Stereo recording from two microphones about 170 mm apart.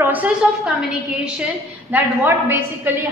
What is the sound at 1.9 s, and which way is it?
Speech, 10° right (ahead or behind).